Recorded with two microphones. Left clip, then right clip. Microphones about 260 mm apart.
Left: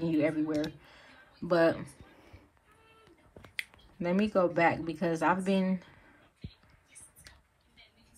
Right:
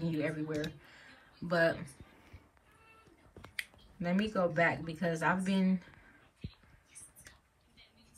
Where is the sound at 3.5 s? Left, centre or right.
Centre.